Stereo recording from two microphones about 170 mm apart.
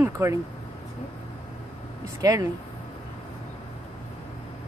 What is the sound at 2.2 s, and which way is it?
Speech, 20° right (ahead or behind).